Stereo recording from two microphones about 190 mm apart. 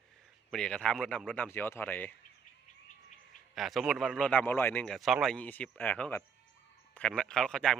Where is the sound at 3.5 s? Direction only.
Centre (ahead or behind).